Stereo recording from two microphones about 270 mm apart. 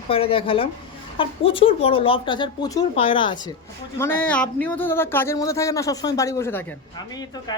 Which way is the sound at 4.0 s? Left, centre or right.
Centre.